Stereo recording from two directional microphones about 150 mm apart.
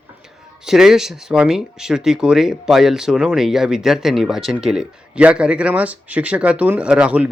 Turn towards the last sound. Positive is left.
turn(degrees=-10)  # may be behind; listen again after turning